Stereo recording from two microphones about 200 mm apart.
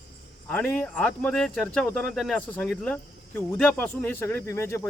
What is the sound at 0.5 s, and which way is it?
Speech, 5° left (ahead or behind).